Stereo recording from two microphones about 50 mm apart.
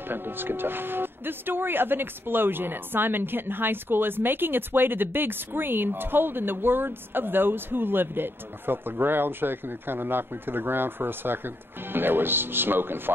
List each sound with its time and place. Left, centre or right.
0.1 s speech: right